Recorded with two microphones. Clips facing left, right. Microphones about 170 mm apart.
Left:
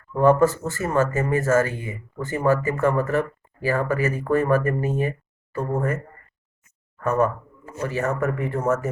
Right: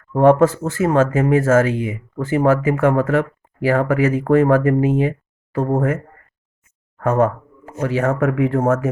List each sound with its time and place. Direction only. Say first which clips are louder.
0.1 s speech: right 4 dB; 90° right
7.0 s speech: right 4 dB; 90° right